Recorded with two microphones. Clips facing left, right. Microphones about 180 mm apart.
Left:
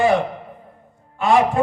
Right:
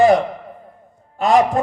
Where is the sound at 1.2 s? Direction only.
40° right (ahead or behind).